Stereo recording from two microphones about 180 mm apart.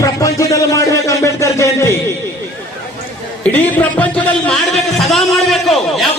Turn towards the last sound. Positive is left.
turn(degrees=0)  # may be behind; listen again after turning